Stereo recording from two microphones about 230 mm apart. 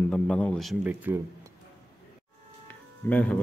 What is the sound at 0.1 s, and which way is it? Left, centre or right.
A man's voice, centre.